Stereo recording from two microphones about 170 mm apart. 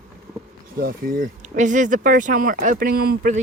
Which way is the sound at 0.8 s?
60° right (ahead or behind).